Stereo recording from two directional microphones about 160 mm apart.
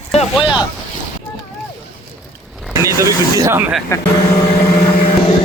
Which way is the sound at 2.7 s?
20° right (ahead or behind).